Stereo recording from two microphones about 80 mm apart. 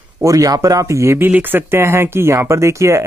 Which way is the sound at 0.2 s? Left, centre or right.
Right.